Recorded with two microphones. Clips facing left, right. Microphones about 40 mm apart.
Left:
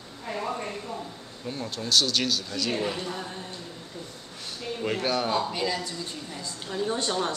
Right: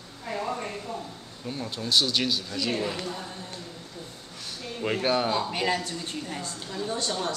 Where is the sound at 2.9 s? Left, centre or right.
Centre.